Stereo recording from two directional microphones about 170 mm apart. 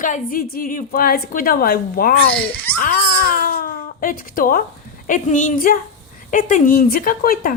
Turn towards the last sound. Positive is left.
turn(degrees=60)  # may be behind; listen again after turning